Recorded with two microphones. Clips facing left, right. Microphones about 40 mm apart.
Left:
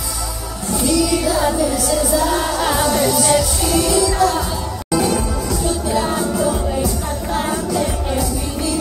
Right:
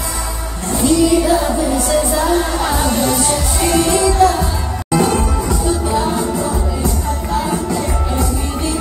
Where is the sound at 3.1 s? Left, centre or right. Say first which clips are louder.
Left 1 dB; right.